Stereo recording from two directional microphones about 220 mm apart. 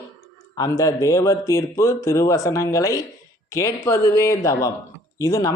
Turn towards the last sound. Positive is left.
turn(degrees=15)  # may be behind; listen again after turning